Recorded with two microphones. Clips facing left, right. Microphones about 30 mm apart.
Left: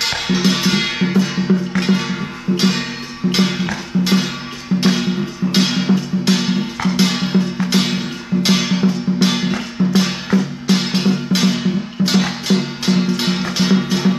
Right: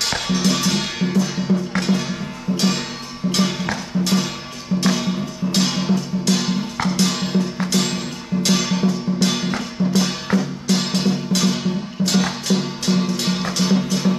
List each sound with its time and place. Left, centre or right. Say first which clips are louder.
0.0 s music: left 3 dB; left